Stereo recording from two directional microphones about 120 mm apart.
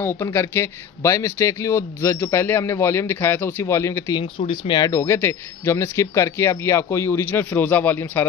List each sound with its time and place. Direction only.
0.0 s speech: 20° left (ahead or behind)
4.2 s speech: 45° left (ahead or behind)
4.9 s speech: 20° left (ahead or behind)